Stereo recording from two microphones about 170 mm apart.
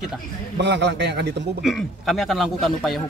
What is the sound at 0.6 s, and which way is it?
Speech, 90° right.